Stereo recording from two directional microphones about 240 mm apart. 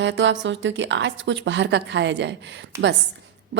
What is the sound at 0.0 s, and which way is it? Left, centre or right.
A woman's voice, right.